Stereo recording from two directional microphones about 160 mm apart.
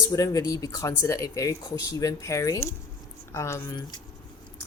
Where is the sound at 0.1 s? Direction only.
20° left (ahead or behind).